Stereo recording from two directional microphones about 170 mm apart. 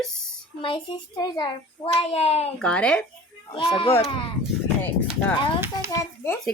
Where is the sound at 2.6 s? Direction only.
5° left (ahead or behind).